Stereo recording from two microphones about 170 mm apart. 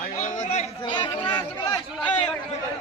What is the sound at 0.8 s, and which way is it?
Chatter, 30° left (ahead or behind).